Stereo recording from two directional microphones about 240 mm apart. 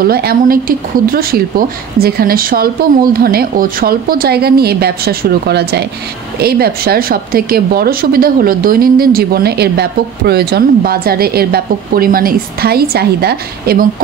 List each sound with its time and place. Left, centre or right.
0.0 s a woman's voice: right